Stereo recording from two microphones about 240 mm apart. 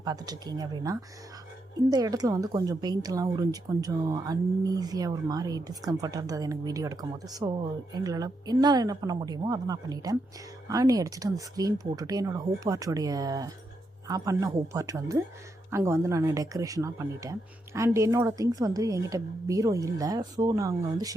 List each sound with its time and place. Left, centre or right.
0.0 s a woman's voice: centre